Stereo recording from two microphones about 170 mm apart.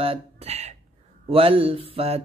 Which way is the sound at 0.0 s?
35° right (ahead or behind).